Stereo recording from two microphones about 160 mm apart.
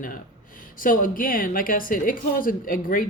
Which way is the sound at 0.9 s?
60° left (ahead or behind).